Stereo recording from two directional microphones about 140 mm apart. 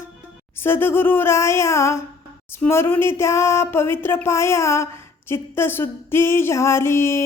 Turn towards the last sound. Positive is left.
turn(degrees=20)  # may be behind; listen again after turning